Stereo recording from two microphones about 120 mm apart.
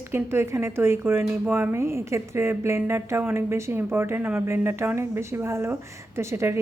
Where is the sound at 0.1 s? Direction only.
20° right (ahead or behind).